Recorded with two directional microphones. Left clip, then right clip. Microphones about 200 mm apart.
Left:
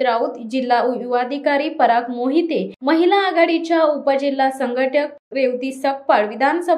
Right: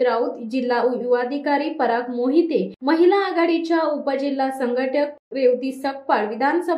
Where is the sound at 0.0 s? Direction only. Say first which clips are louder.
Left 2 dB; 30° left (ahead or behind).